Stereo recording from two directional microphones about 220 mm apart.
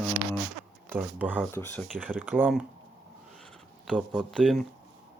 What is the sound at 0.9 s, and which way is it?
Speech, 5° right (ahead or behind).